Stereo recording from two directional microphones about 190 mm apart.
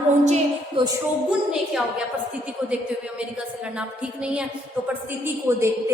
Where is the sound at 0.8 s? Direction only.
25° right (ahead or behind).